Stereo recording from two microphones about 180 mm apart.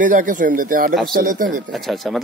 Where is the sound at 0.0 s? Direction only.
45° right (ahead or behind).